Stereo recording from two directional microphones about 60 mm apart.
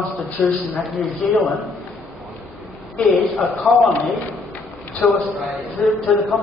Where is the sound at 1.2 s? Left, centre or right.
Centre.